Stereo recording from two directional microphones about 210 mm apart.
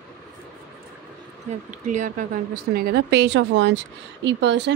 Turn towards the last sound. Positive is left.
turn(degrees=-55)  # may be behind; listen again after turning